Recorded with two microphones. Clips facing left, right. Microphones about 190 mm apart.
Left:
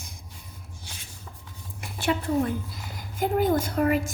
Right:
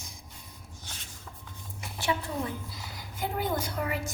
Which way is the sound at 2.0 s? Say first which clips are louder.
Left 7 dB; 60° left (ahead or behind).